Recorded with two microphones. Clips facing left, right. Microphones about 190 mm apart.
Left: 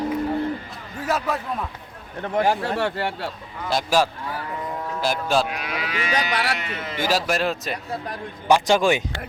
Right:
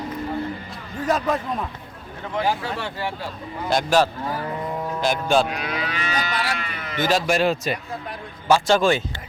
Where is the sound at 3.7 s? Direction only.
5° left (ahead or behind).